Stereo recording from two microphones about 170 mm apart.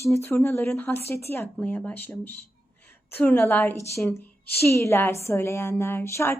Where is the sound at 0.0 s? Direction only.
15° left (ahead or behind).